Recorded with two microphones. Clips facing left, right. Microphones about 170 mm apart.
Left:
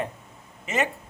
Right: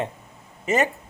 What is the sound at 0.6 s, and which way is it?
Speech, 40° right (ahead or behind).